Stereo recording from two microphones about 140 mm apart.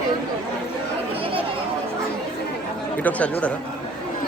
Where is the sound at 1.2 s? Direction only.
40° right (ahead or behind).